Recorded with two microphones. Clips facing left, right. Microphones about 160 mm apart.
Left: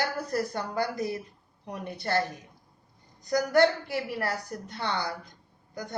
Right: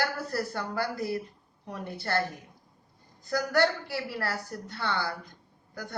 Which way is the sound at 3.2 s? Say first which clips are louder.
Left 3 dB; 20° left (ahead or behind).